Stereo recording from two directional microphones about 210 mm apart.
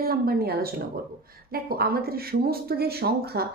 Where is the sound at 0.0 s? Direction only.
45° right (ahead or behind).